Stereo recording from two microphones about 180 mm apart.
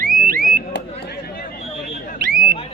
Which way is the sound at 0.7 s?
70° left (ahead or behind).